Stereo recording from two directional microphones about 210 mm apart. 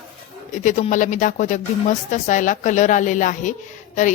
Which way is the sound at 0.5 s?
35° left (ahead or behind).